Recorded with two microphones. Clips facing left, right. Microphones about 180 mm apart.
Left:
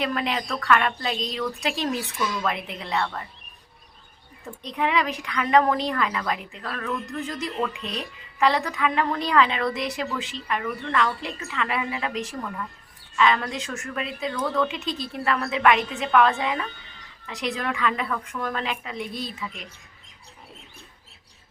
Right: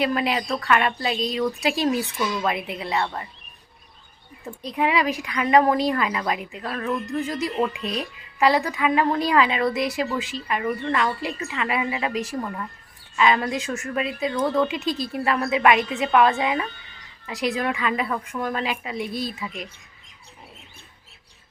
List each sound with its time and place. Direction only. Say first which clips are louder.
0.0 s a woman's voice: right 3 dB; 10° right (ahead or behind)
4.6 s a woman's voice: right 2 dB; 10° right (ahead or behind)
19.0 s speech: right 6 dB; 35° right (ahead or behind)